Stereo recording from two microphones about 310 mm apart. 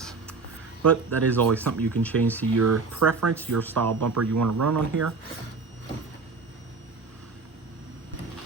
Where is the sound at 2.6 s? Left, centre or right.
Right.